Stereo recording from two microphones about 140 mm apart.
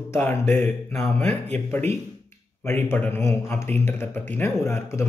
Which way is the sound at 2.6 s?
15° left (ahead or behind).